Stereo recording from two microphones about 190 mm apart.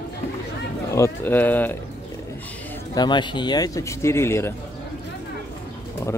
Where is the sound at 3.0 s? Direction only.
25° left (ahead or behind).